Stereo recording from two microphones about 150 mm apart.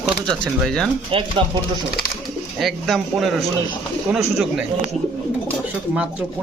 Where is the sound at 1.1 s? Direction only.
35° right (ahead or behind).